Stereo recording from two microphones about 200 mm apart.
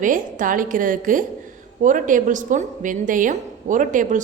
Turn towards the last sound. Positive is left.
turn(degrees=-40)  # may be behind; listen again after turning